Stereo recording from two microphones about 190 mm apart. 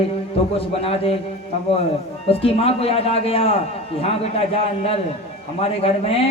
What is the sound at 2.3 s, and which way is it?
A man's voice, 30° left (ahead or behind).